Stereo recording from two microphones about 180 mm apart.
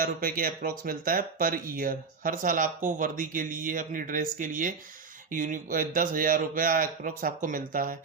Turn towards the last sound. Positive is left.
turn(degrees=-50)  # may be behind; listen again after turning